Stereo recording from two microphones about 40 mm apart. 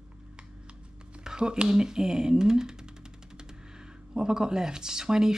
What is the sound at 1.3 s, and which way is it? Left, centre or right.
Speech, right.